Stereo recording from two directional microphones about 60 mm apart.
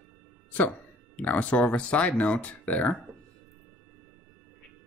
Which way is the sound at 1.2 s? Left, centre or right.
Left.